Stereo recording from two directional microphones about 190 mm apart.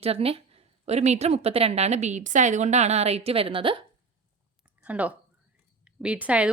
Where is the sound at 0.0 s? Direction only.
30° right (ahead or behind).